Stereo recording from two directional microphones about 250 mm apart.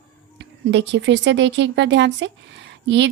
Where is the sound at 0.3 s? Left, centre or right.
Right.